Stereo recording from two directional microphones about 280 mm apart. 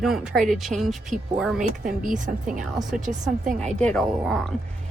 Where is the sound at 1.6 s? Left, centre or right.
Right.